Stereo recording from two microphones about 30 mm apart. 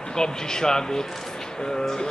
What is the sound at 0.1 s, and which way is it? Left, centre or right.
A man's voice, left.